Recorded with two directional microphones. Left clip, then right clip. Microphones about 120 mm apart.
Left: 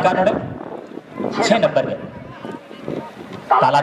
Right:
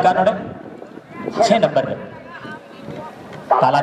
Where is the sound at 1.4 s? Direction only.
5° right (ahead or behind).